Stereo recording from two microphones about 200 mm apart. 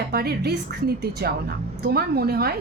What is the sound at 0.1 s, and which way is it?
A woman's voice, 50° right (ahead or behind).